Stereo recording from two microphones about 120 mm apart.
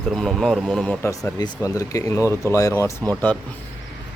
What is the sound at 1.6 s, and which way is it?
Speech, 30° left (ahead or behind).